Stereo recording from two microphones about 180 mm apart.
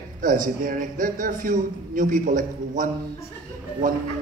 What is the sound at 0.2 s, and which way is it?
A man's voice, 50° right (ahead or behind).